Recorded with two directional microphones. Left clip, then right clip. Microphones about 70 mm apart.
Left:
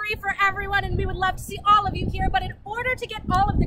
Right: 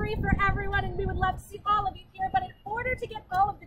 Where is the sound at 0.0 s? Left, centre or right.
Centre.